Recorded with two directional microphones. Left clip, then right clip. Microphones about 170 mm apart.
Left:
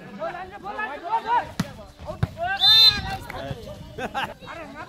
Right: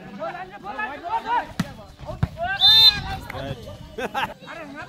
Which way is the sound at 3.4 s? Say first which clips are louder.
Right 1 dB; 30° right (ahead or behind).